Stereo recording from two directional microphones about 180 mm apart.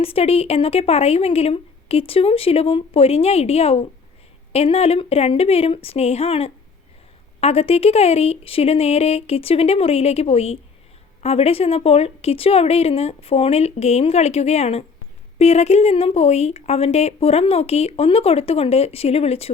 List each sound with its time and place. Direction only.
0.0 s speech: 35° left (ahead or behind)